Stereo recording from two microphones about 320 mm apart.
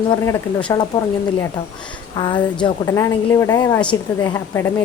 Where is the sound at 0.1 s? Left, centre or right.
Centre.